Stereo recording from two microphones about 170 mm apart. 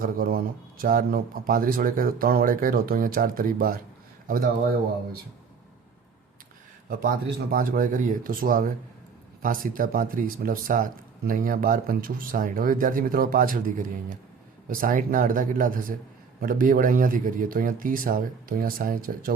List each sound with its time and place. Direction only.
0.0 s a man's voice: 60° right (ahead or behind)
7.5 s a man's voice: 55° right (ahead or behind)